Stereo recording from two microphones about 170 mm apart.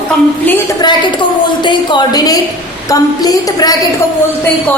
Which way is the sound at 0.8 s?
25° left (ahead or behind).